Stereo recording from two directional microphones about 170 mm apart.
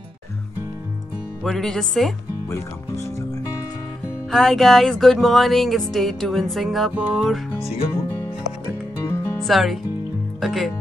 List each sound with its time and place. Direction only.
1.4 s speech: centre (ahead or behind)
4.3 s speech: centre (ahead or behind)
9.0 s music: 15° left (ahead or behind)
9.4 s speech: centre (ahead or behind)